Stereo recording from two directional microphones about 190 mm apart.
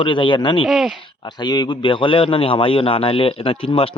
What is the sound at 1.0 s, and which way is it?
A man's voice, 25° left (ahead or behind).